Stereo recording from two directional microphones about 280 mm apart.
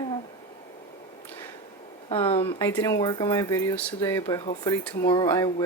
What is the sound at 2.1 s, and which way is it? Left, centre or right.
Speech, centre.